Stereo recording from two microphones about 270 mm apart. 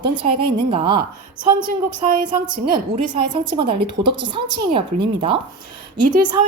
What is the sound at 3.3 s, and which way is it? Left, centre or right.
A woman's voice, centre.